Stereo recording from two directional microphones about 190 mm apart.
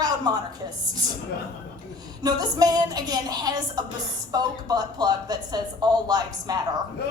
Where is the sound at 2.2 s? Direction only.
20° right (ahead or behind).